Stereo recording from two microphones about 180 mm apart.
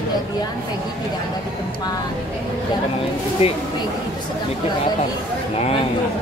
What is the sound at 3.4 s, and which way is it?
Speech, 35° left (ahead or behind).